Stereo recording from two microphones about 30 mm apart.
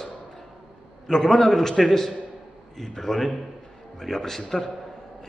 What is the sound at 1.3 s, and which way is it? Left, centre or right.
A man's voice, centre.